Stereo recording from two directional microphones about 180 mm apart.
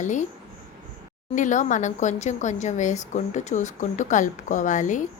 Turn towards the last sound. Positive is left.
turn(degrees=45)  # may be behind; listen again after turning